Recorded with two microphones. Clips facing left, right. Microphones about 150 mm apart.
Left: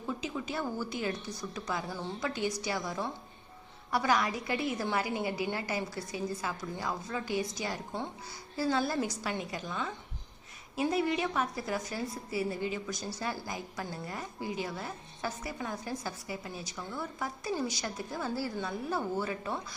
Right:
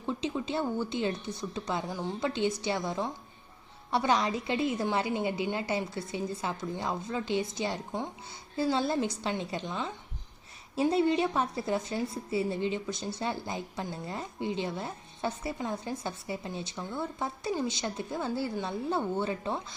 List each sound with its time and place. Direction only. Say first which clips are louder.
0.0 s a woman's voice: right 4 dB; 25° right (ahead or behind)
1.9 s a woman's voice: right 3 dB; 15° right (ahead or behind)
2.2 s a woman's voice: right 4 dB; 25° right (ahead or behind)
10.9 s a woman's voice: right 4 dB; 30° right (ahead or behind)